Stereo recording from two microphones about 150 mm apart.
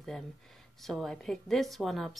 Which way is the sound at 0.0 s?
5° left (ahead or behind).